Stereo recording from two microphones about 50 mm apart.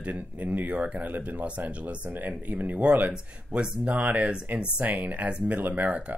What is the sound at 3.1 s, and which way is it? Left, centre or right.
Speech, centre.